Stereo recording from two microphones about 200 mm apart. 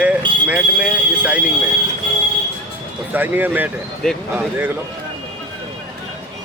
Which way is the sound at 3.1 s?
10° right (ahead or behind).